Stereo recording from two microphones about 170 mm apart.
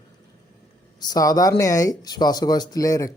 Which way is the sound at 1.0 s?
20° left (ahead or behind).